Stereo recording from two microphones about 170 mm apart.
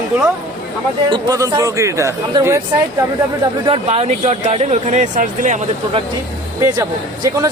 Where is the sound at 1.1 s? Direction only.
25° right (ahead or behind).